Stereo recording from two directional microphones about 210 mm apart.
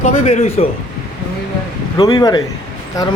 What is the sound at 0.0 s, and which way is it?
Speech, 35° left (ahead or behind).